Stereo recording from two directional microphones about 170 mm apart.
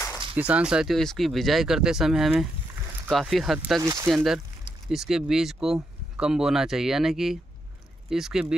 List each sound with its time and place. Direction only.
0.4 s speech: 5° right (ahead or behind)
3.8 s speech: 20° right (ahead or behind)
4.1 s speech: centre (ahead or behind)